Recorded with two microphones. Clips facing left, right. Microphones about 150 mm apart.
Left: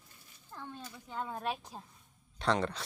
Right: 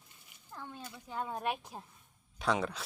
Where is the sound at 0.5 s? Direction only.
10° right (ahead or behind).